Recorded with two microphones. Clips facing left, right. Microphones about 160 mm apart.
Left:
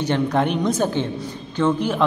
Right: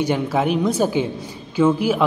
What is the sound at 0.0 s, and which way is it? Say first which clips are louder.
A woman's voice: even; 5° right (ahead or behind).